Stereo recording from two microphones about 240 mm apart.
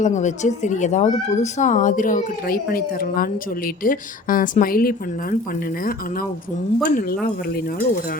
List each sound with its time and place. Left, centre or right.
0.0 s speech: left
6.8 s speech: left